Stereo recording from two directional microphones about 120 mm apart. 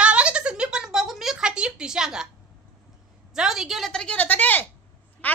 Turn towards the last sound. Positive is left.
turn(degrees=15)  # may be behind; listen again after turning